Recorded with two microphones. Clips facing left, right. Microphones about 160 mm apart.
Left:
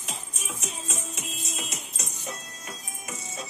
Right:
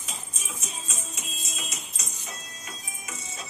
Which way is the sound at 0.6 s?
65° left (ahead or behind).